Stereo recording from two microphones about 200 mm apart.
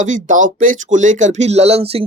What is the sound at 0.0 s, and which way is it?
Speech, 40° right (ahead or behind).